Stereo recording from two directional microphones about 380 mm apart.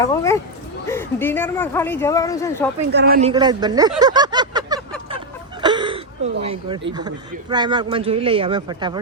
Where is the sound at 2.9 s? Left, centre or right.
Right.